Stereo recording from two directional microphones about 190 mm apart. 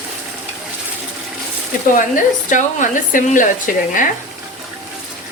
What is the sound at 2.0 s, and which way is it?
Speech, 45° left (ahead or behind).